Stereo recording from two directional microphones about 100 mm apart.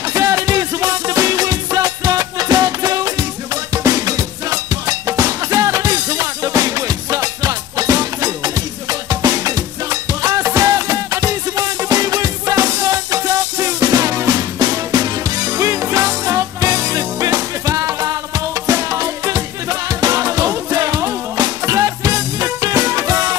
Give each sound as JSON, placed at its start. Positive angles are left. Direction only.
{"t": 0.1, "sound": "music", "side_deg": -30}